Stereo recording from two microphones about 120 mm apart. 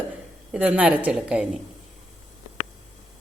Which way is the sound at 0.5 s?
10° right (ahead or behind).